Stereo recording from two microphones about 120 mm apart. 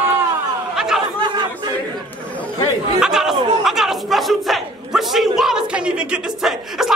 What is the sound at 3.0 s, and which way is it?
Chatter, 5° right (ahead or behind).